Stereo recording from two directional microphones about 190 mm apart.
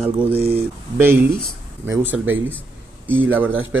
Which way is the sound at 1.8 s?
10° right (ahead or behind).